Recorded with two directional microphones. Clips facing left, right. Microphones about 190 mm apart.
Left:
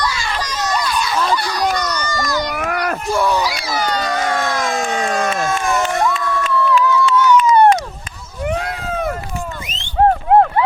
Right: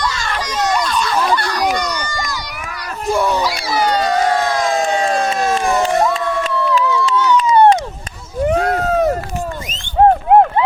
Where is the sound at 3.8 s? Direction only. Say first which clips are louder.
Right 5 dB; 35° right (ahead or behind).